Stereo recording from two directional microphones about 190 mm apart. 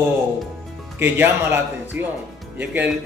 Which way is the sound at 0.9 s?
10° right (ahead or behind).